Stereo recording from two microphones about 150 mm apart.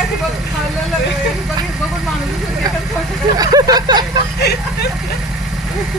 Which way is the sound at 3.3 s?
25° right (ahead or behind).